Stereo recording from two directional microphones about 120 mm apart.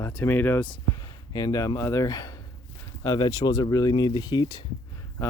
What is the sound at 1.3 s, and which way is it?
Speech, 30° left (ahead or behind).